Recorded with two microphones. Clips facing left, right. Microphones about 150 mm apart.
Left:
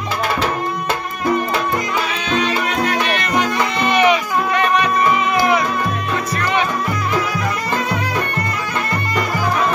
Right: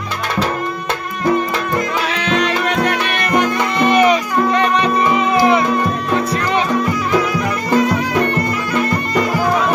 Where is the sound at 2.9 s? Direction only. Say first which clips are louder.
Right 1 dB; 60° right (ahead or behind).